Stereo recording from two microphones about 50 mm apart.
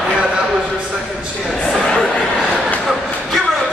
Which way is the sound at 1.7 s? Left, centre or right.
Centre.